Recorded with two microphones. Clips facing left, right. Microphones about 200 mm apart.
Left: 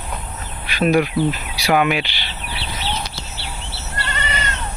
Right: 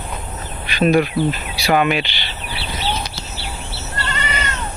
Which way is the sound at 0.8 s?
10° left (ahead or behind).